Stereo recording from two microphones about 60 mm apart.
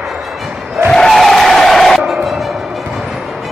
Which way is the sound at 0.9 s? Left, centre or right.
Centre.